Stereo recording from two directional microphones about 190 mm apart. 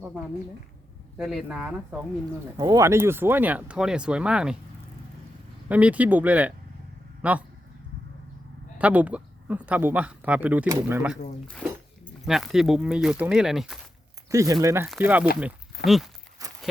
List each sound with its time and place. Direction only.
1.2 s speech: centre (ahead or behind)
2.6 s speech: 15° right (ahead or behind)
5.6 s speech: 5° right (ahead or behind)
8.8 s speech: 5° right (ahead or behind)
12.2 s speech: centre (ahead or behind)
14.3 s speech: 15° right (ahead or behind); by 16.0 s centre (ahead or behind)
16.4 s walk: 15° right (ahead or behind)